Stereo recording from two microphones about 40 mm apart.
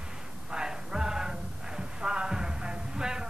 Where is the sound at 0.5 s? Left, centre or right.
Centre.